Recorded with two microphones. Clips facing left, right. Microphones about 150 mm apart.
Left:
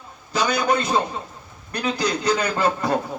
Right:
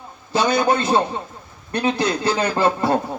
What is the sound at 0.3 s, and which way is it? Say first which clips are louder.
Speech: right 3 dB; 30° right (ahead or behind).